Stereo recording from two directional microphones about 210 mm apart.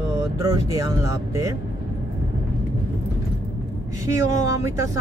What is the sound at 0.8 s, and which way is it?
Speech, 15° right (ahead or behind).